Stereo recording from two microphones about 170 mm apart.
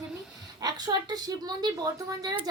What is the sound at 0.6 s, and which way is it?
Speech, 25° right (ahead or behind).